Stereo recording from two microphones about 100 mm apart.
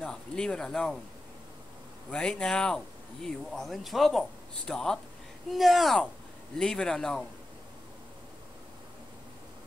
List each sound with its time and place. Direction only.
0.0 s speech: 5° left (ahead or behind)
2.0 s speech: 10° left (ahead or behind)